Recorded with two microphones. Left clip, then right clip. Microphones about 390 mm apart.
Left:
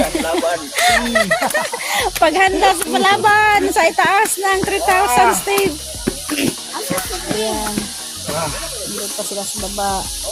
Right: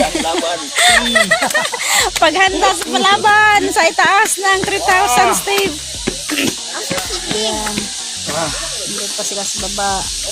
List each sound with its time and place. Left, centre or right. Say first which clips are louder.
0.2 s speech: right 1 dB; left
9.7 s speech: right 1 dB; left